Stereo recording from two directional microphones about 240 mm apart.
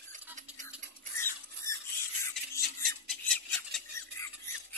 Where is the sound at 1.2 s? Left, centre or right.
Centre.